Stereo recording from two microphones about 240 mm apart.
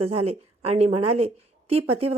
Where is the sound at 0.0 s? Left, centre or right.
Right.